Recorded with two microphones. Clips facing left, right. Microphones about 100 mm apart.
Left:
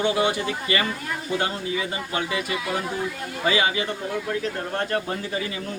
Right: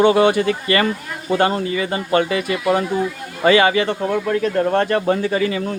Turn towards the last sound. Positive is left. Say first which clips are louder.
# right 10 dB
turn(degrees=-85)